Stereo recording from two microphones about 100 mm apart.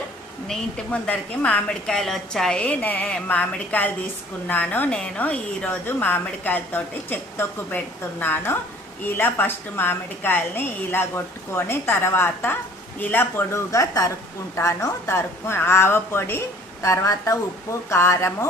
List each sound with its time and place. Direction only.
0.9 s a woman's voice: 15° left (ahead or behind)
13.7 s a woman's voice: 35° left (ahead or behind)
16.8 s speech: 35° left (ahead or behind)